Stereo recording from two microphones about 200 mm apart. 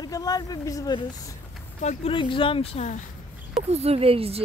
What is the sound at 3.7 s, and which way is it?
Speech, 30° right (ahead or behind).